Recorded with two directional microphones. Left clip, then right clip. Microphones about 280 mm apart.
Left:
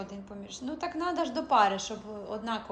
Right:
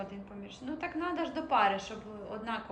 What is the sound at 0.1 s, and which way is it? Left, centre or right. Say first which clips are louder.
A woman's voice: left 3 dB; centre.